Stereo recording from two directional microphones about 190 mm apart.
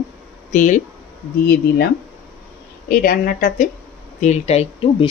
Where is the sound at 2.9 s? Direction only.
50° left (ahead or behind).